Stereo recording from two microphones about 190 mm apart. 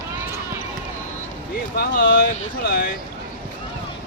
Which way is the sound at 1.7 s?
55° left (ahead or behind).